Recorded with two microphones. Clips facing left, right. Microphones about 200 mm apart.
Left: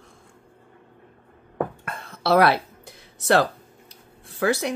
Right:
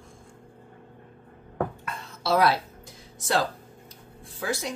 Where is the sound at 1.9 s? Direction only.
60° left (ahead or behind).